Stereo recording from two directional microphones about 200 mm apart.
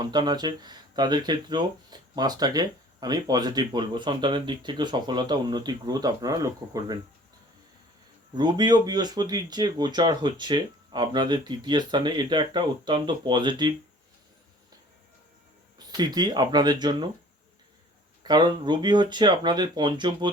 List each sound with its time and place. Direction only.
0.0 s speech: 20° right (ahead or behind)
8.4 s speech: 20° right (ahead or behind)
15.9 s speech: 20° right (ahead or behind)
18.2 s speech: 20° right (ahead or behind)